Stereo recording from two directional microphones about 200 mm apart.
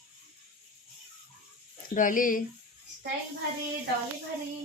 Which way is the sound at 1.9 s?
40° left (ahead or behind).